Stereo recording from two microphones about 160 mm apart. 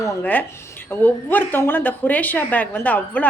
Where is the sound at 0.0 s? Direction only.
10° left (ahead or behind).